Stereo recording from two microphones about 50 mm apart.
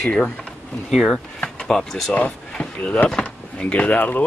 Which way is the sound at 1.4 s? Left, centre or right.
Centre.